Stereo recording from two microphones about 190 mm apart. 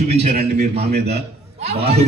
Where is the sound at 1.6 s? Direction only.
35° right (ahead or behind).